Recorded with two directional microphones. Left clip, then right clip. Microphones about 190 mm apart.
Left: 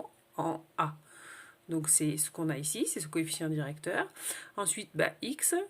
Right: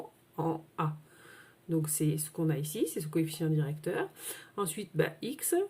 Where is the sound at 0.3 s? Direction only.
30° left (ahead or behind).